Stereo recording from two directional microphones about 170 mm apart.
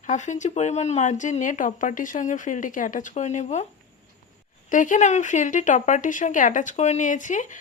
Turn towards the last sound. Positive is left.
turn(degrees=50)  # may be behind; listen again after turning